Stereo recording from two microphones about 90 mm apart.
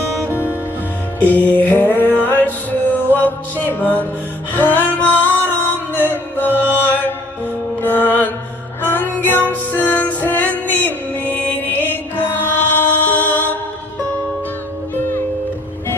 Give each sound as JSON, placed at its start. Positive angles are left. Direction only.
{"t": 0.3, "sound": "music", "side_deg": 25}
{"t": 6.5, "sound": "music", "side_deg": -20}
{"t": 6.8, "sound": "music", "side_deg": 20}
{"t": 14.9, "sound": "music", "side_deg": 20}